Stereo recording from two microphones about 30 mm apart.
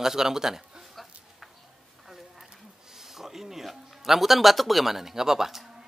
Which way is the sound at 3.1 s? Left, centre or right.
Centre.